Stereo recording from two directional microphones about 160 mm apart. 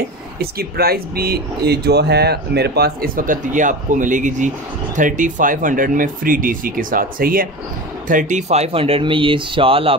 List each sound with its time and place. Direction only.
0.4 s speech: 75° right (ahead or behind)
8.1 s speech: 50° right (ahead or behind); by 9.9 s 35° right (ahead or behind)